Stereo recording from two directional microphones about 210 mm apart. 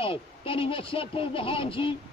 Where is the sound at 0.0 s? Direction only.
25° left (ahead or behind).